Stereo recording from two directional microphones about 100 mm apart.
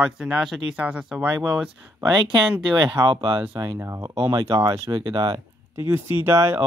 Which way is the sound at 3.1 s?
60° right (ahead or behind).